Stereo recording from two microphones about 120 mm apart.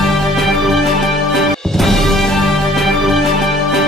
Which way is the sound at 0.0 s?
Centre (ahead or behind).